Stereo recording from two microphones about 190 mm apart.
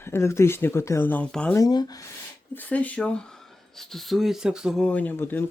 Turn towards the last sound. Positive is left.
turn(degrees=10)  # may be behind; listen again after turning